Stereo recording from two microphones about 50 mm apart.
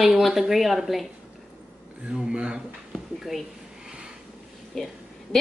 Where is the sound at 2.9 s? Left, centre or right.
Centre.